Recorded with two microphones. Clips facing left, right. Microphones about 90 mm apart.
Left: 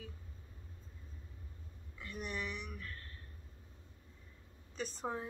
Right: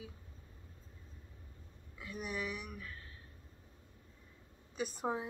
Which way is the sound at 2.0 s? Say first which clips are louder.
Right 1 dB; 5° right (ahead or behind).